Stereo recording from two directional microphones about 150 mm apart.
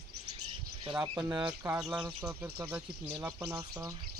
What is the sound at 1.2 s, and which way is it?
Speech, 10° right (ahead or behind).